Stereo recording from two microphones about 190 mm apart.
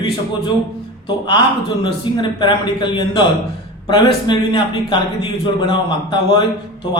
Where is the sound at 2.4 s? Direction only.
25° left (ahead or behind).